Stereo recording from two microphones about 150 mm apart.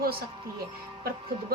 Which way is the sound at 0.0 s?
80° right.